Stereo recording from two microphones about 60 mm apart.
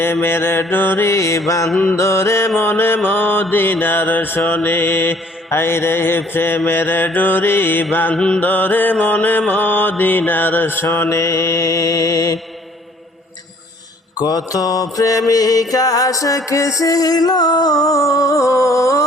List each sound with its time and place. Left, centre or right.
0.0 s mantra: left
1.5 s music: left
2.0 s mantra: left
2.6 s mantra: left
8.1 s mantra: centre
8.4 s mantra: left
11.1 s mantra: left
14.3 s mantra: left
15.3 s mantra: left
16.5 s music: left